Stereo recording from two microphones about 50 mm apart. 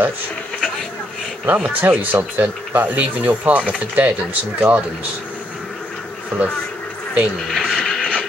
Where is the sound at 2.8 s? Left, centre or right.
Right.